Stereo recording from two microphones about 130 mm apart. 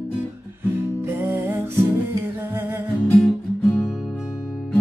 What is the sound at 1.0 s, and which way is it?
Music, 20° right (ahead or behind).